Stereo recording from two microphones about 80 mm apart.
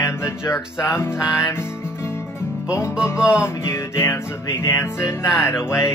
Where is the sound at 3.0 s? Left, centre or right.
Left.